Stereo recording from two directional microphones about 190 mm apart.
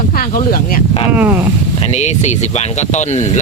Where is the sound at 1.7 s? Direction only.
35° left (ahead or behind).